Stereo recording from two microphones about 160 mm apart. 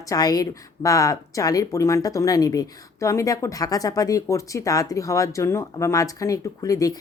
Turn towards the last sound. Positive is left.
turn(degrees=20)  # may be behind; listen again after turning